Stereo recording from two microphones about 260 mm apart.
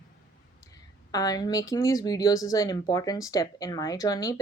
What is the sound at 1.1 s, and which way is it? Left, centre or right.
A woman's voice, centre.